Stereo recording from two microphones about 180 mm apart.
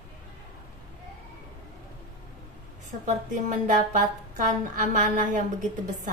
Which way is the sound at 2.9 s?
45° right (ahead or behind).